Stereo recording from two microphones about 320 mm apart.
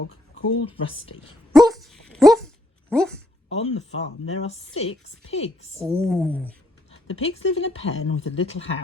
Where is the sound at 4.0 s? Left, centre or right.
Centre.